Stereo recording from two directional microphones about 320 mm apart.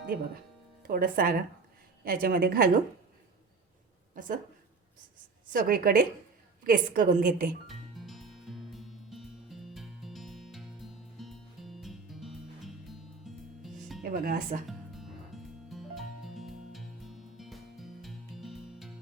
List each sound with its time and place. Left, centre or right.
0.8 s a woman's voice: right
4.1 s a woman's voice: right
5.5 s a woman's voice: right
7.7 s music: centre
14.0 s speech: right
14.7 s music: centre